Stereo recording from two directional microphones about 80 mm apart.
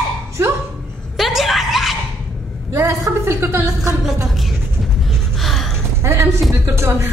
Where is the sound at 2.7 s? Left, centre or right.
Right.